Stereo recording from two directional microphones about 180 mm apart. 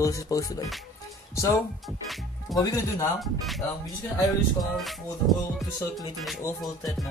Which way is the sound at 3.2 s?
Centre (ahead or behind).